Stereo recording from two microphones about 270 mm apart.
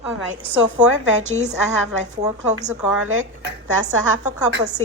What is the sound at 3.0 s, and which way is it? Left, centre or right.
Speech, right.